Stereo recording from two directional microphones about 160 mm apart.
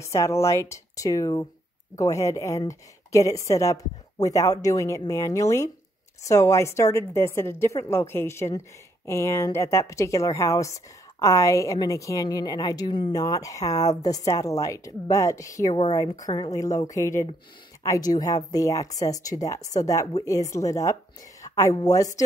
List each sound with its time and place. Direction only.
0.0 s a woman's voice: 20° left (ahead or behind)